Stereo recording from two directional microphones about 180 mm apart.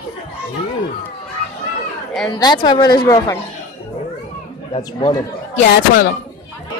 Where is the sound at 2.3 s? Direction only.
25° left (ahead or behind).